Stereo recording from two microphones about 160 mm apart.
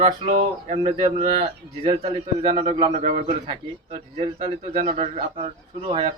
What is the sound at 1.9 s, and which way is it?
Speech, 45° right (ahead or behind).